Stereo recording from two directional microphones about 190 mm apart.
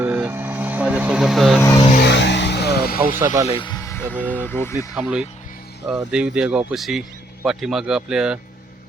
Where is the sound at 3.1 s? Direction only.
15° right (ahead or behind).